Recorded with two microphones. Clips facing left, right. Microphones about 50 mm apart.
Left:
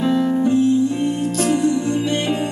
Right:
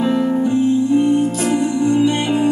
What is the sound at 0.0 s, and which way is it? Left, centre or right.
Music, right.